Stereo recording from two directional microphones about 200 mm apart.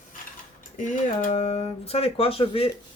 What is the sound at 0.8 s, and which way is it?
Speech, 40° left (ahead or behind).